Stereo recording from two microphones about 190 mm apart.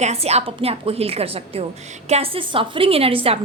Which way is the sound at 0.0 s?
35° right (ahead or behind).